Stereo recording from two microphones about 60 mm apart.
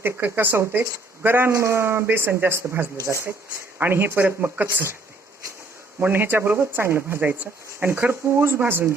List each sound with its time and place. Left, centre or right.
0.0 s speech: right
1.5 s speech: right
3.1 s speech: right
3.8 s speech: right
6.0 s speech: right